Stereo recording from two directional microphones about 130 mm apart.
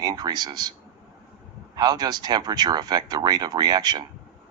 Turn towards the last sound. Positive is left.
turn(degrees=-35)  # may be behind; listen again after turning